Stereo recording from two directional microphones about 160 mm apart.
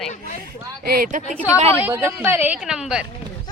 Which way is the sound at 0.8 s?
65° right (ahead or behind).